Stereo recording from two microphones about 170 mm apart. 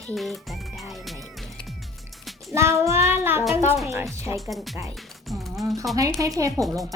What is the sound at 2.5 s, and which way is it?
Child singing, 15° right (ahead or behind).